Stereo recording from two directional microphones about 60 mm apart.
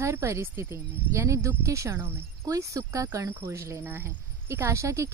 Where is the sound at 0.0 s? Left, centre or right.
Right.